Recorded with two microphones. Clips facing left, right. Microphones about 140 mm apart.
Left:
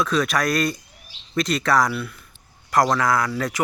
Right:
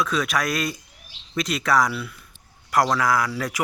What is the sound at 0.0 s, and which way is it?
Speech, centre (ahead or behind).